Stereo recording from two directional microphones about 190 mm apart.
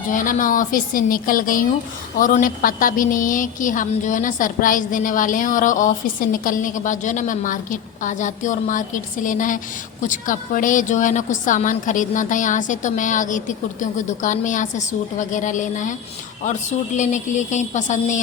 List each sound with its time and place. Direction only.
0.1 s a woman's voice: 45° left (ahead or behind)
17.0 s a woman's voice: 40° left (ahead or behind)